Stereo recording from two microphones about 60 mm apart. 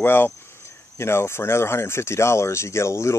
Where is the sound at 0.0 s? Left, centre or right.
Left.